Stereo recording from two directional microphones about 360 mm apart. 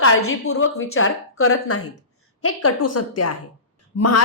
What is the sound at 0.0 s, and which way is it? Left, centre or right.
A woman's voice, left.